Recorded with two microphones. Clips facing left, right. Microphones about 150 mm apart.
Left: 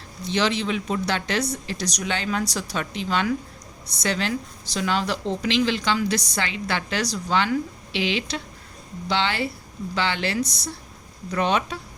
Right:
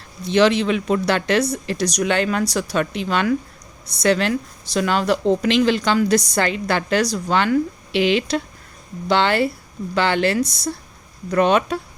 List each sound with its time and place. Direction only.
0.3 s a woman's voice: 60° right (ahead or behind)